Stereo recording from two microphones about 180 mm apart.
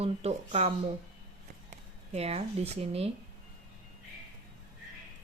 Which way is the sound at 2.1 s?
35° right (ahead or behind).